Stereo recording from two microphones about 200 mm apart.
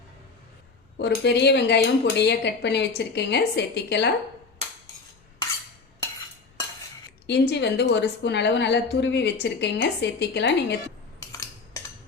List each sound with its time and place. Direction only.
0.9 s a woman's voice: 60° left (ahead or behind)
7.3 s a woman's voice: 60° left (ahead or behind)
11.2 s cutlery: 15° left (ahead or behind)